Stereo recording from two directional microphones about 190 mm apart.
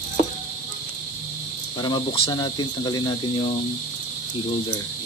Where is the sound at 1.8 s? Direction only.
25° left (ahead or behind).